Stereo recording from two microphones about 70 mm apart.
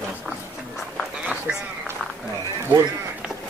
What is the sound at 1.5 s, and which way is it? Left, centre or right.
Speech, centre.